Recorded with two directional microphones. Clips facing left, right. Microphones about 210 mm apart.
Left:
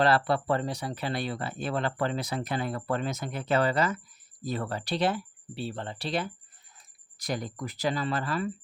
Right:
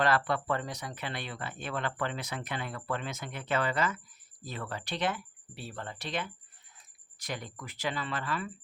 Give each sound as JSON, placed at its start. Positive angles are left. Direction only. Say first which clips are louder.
{"t": 0.0, "sound": "speech", "louder": "left 4 dB", "side_deg": 35}